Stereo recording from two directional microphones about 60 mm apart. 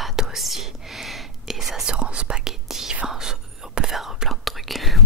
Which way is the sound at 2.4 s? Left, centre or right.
Centre.